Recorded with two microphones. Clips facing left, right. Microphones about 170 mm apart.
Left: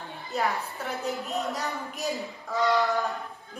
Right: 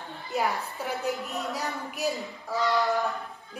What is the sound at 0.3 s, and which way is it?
Speech, 15° right (ahead or behind).